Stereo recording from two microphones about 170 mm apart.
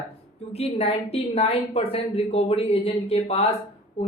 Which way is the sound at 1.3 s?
35° left (ahead or behind).